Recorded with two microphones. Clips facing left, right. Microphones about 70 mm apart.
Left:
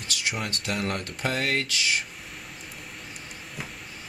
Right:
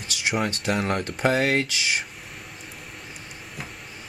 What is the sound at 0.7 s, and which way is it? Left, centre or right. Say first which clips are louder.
Speech: right 4 dB; centre.